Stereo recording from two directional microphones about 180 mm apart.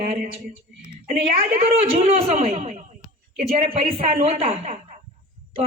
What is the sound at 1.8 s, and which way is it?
A man's voice, 35° right (ahead or behind).